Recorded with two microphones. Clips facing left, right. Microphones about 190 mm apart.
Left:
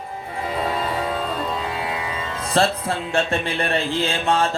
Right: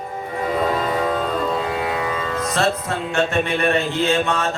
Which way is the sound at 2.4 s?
30° left (ahead or behind).